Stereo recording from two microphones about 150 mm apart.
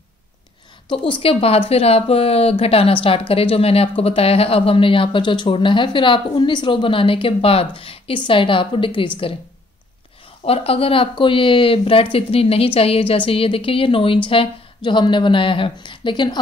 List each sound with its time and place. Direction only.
0.8 s speech: 35° left (ahead or behind)
10.4 s speech: 40° left (ahead or behind)